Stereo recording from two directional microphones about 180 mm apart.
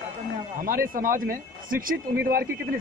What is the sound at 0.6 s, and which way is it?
Speech, 55° right (ahead or behind).